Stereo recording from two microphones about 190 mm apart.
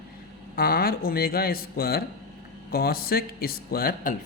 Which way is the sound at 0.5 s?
50° left (ahead or behind).